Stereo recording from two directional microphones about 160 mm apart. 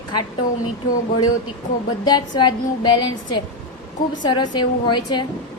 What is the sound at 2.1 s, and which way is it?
A woman's voice, 25° left (ahead or behind).